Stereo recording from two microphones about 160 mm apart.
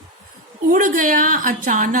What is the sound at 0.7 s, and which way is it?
Speech, 55° right (ahead or behind).